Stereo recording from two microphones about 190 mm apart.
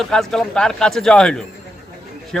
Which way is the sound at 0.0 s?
Centre (ahead or behind).